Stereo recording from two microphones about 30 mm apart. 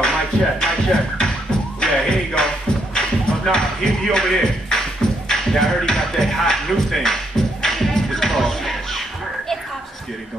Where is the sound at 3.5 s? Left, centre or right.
Left.